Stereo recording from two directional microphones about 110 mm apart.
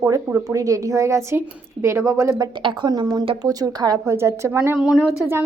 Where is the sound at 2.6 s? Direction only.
45° right (ahead or behind); by 4.8 s 25° right (ahead or behind).